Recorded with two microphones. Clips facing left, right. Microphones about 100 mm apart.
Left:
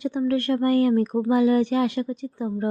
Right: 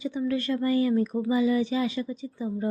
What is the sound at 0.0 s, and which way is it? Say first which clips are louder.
Speech: left 4 dB; 60° left (ahead or behind).